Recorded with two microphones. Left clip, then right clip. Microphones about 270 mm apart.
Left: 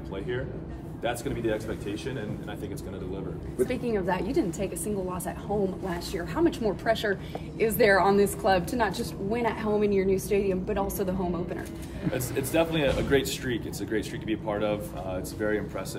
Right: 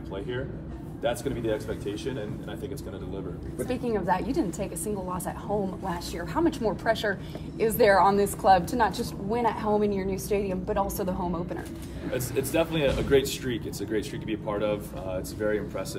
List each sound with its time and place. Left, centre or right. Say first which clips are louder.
1.0 s speech: right 1 dB; centre
3.6 s a woman's voice: right 1 dB; centre
12.5 s speech: left 1 dB; centre